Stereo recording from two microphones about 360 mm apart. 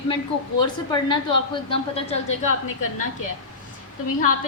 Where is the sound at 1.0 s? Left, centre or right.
Centre.